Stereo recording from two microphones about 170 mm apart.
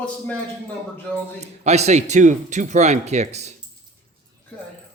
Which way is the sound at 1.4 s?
40° right (ahead or behind).